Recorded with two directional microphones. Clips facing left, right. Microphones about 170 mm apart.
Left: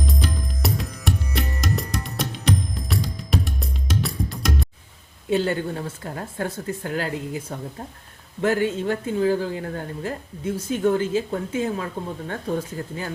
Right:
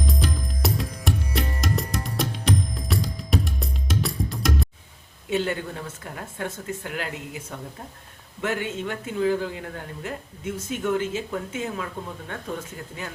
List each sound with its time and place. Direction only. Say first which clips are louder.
0.1 s music: even; centre (ahead or behind)
5.3 s speech: left 4 dB; 35° left (ahead or behind)
8.4 s speech: left 6 dB; 35° left (ahead or behind)